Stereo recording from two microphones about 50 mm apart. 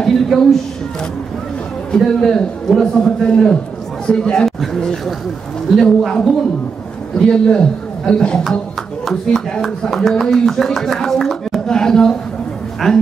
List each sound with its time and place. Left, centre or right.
0.0 s speech: centre
1.9 s speech: centre
7.2 s speech: centre
9.0 s speech: centre